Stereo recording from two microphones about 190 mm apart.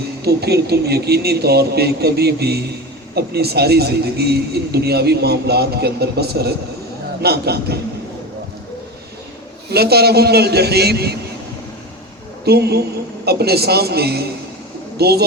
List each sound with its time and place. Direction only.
0.2 s a man's voice: 55° right (ahead or behind)
9.6 s a man's voice: 55° right (ahead or behind)
12.5 s a man's voice: 55° right (ahead or behind)